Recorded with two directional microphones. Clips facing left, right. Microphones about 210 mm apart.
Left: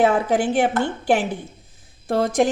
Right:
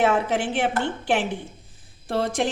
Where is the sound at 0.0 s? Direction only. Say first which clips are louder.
Left 3 dB; 35° left (ahead or behind).